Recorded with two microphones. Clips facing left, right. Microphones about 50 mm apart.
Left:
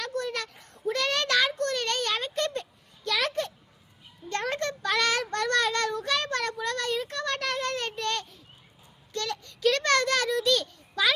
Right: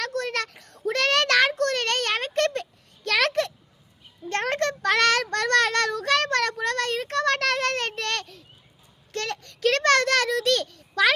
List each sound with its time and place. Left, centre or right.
0.0 s child singing: right
4.3 s child singing: right
9.1 s a sound: right